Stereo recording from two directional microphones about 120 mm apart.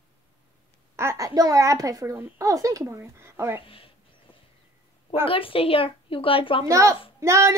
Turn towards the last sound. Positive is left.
turn(degrees=-25)  # may be behind; listen again after turning